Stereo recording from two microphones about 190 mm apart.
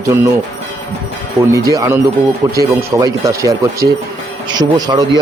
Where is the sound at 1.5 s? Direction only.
20° right (ahead or behind).